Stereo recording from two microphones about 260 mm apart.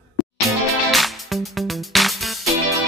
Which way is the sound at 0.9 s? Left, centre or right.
Centre.